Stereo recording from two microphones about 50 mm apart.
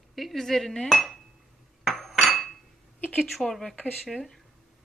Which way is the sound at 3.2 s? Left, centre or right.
Centre.